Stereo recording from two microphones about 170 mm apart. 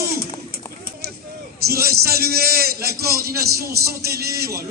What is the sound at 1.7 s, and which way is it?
A man's voice, 65° right (ahead or behind).